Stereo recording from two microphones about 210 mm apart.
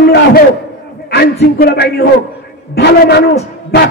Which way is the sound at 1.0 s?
50° left (ahead or behind).